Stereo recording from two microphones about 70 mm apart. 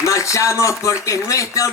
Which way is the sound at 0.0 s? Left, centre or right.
Left.